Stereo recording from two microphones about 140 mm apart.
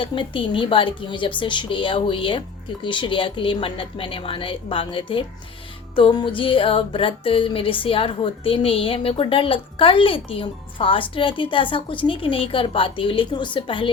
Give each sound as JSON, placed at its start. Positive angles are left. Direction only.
{"t": 0.0, "sound": "music", "side_deg": 35}